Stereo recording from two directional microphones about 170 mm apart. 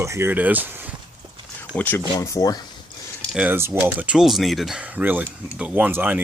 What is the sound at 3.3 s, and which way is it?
Speech, 10° right (ahead or behind).